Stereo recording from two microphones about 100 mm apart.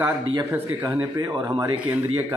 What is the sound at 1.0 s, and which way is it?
Speech, 40° right (ahead or behind).